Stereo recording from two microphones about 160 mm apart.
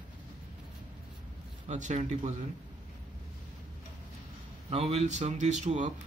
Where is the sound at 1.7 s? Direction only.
50° right (ahead or behind).